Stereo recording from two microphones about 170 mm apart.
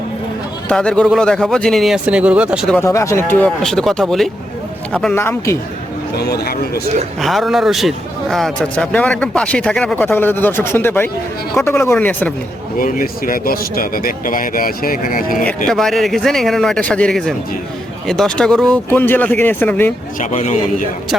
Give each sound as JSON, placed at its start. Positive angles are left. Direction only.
{"t": 0.7, "sound": "a man's voice", "side_deg": 5}
{"t": 2.6, "sound": "a man's voice", "side_deg": 10}
{"t": 6.1, "sound": "speech", "side_deg": 70}
{"t": 7.2, "sound": "a man's voice", "side_deg": 0}
{"t": 12.8, "sound": "speech", "side_deg": 55}
{"t": 15.4, "sound": "a man's voice", "side_deg": 5}
{"t": 20.1, "sound": "speech", "side_deg": 45}